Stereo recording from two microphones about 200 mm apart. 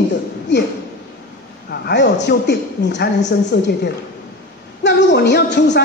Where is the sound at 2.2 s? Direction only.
60° left (ahead or behind).